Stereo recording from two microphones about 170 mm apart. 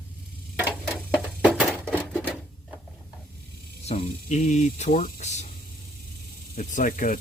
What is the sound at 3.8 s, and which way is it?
Speech, 40° left (ahead or behind).